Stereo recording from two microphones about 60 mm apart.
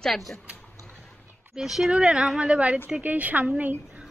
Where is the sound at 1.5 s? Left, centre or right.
Centre; by 3.7 s right.